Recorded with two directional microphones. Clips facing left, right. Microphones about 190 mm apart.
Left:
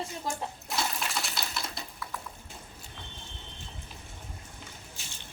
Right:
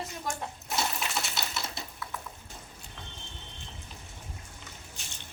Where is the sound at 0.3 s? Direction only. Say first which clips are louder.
Left 1 dB; 30° left (ahead or behind).